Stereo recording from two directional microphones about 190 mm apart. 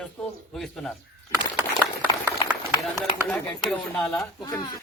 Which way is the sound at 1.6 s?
15° right (ahead or behind).